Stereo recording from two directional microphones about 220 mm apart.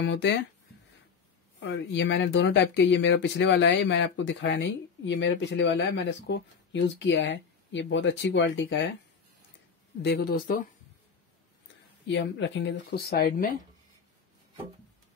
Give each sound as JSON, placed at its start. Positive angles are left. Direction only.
{"t": 0.0, "sound": "speech", "side_deg": 50}
{"t": 1.6, "sound": "speech", "side_deg": 55}
{"t": 10.0, "sound": "speech", "side_deg": 45}
{"t": 12.1, "sound": "speech", "side_deg": 55}